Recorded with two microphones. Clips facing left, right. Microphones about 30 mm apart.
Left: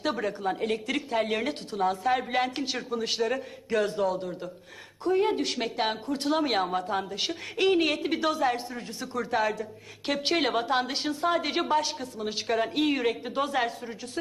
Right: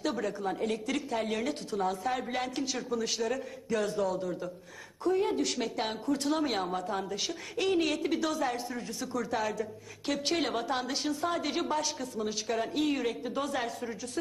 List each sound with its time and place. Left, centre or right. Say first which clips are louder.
0.0 s a woman's voice: left 3 dB; left